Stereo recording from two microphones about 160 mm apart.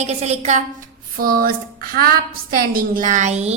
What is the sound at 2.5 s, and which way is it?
A woman's voice, 60° right (ahead or behind).